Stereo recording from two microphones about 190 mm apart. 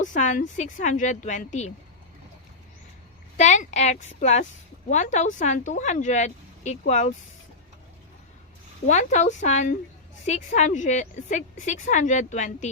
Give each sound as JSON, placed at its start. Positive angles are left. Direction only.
{"t": 0.0, "sound": "a woman's voice", "side_deg": 40}
{"t": 3.3, "sound": "a woman's voice", "side_deg": 40}
{"t": 8.9, "sound": "a woman's voice", "side_deg": 40}